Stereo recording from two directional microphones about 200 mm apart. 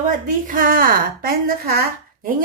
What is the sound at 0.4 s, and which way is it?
A woman's voice, 45° right (ahead or behind).